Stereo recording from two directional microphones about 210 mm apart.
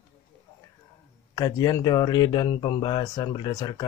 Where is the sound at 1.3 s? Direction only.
20° left (ahead or behind).